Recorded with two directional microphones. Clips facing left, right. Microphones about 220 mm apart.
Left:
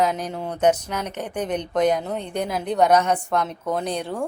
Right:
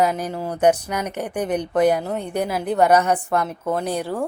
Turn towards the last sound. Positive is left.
turn(degrees=-5)  # may be behind; listen again after turning